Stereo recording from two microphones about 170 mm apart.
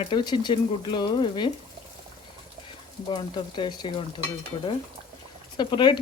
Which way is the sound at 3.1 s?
30° left (ahead or behind).